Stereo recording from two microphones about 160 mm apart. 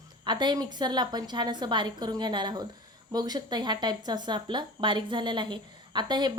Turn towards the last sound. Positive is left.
turn(degrees=-25)  # may be behind; listen again after turning